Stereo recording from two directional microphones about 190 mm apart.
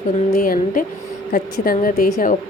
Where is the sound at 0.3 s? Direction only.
50° left (ahead or behind).